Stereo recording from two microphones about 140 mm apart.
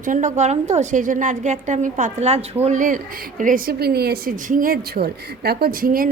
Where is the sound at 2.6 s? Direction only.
65° right (ahead or behind).